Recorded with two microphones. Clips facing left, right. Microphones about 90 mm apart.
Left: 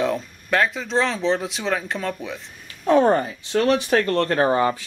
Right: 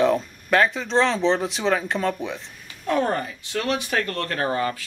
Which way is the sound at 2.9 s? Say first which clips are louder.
Left 6 dB; 30° left (ahead or behind).